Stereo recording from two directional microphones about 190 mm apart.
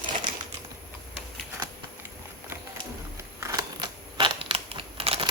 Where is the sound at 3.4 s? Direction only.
15° right (ahead or behind).